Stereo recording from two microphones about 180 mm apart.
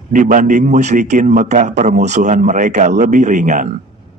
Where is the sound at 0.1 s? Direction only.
45° right (ahead or behind).